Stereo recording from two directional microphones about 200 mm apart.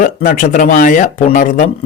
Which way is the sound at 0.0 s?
40° left (ahead or behind).